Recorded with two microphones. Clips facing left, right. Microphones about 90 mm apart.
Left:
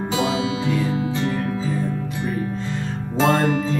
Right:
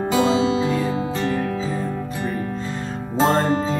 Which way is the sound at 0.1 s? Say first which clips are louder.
Right 4 dB; 35° right (ahead or behind).